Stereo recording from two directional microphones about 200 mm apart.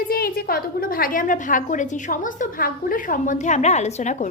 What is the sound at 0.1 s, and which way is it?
A woman's voice, 50° left (ahead or behind).